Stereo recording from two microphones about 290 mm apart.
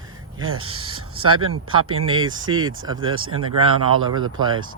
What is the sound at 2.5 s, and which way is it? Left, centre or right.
Speech, centre.